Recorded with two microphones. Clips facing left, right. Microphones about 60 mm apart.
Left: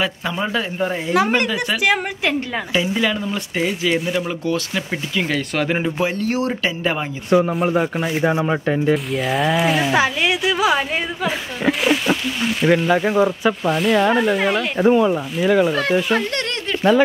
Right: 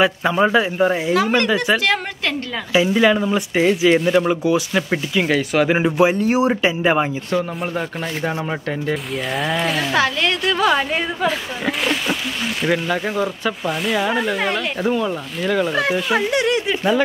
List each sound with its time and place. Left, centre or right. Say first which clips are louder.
0.0 s speech: right 6 dB; centre
1.1 s speech: even; centre
2.9 s speech: right 5 dB; centre
7.2 s speech: left 5 dB; centre
8.9 s speech: left 3 dB; centre
13.7 s speech: left 4 dB; centre
14.8 s speech: left 9 dB; centre
15.7 s speech: left 1 dB; centre